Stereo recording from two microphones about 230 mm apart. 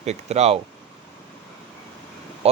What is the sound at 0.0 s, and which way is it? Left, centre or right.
Speech, right.